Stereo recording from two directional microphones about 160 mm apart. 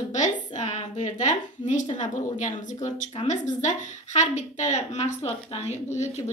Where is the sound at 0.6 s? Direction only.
40° left (ahead or behind).